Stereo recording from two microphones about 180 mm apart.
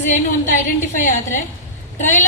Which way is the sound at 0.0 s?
45° left (ahead or behind).